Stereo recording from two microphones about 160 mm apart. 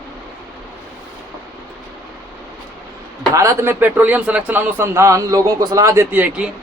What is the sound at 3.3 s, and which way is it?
Speech, 20° right (ahead or behind).